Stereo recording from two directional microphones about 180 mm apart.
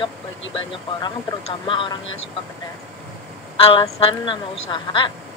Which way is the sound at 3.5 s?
30° left (ahead or behind).